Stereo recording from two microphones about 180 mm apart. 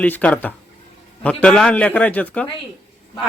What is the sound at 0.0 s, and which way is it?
Speech, 10° left (ahead or behind).